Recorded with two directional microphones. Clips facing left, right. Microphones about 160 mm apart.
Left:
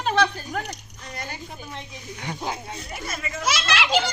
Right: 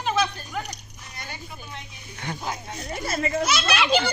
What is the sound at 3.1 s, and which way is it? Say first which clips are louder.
Speech: right 10 dB; 35° right (ahead or behind).